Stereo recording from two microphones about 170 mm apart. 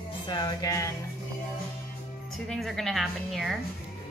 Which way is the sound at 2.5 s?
Centre (ahead or behind).